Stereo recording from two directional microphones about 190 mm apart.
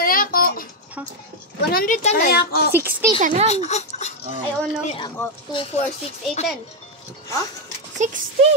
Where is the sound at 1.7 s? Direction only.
50° left (ahead or behind).